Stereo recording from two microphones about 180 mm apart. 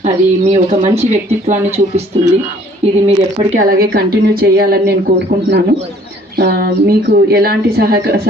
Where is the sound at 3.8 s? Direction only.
60° right (ahead or behind).